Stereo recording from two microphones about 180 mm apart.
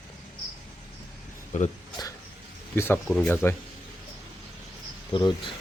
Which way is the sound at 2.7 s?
15° left (ahead or behind).